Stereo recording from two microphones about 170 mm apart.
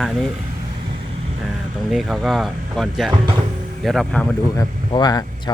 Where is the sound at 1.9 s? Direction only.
Centre (ahead or behind).